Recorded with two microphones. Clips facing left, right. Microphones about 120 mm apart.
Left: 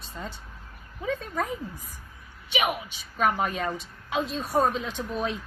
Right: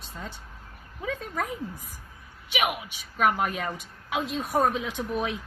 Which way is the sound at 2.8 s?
5° right (ahead or behind).